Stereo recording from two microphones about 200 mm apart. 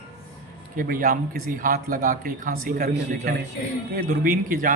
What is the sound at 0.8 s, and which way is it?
Speech, 45° right (ahead or behind).